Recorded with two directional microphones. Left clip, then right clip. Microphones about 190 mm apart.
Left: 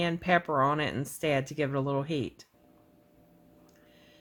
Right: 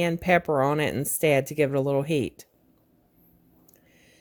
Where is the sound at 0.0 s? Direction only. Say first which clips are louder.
Right 4 dB; 35° right (ahead or behind).